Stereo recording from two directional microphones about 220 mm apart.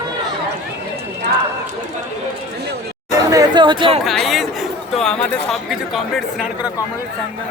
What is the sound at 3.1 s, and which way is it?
Chatter, 15° right (ahead or behind).